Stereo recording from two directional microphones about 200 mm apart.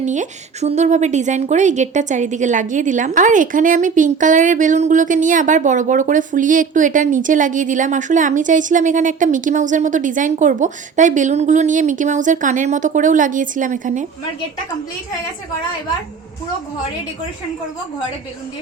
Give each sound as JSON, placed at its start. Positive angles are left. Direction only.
{"t": 0.0, "sound": "a woman's voice", "side_deg": -35}